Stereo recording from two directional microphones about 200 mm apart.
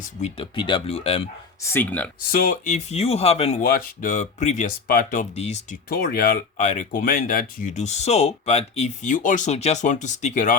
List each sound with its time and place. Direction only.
0.2 s speech: 30° left (ahead or behind)
1.7 s speech: 10° left (ahead or behind)
2.3 s speech: 45° left (ahead or behind)
3.6 s speech: 45° left (ahead or behind)
5.9 s speech: 50° left (ahead or behind)